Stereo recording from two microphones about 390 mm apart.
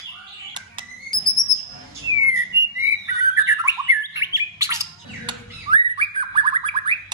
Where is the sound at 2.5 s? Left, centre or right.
Centre.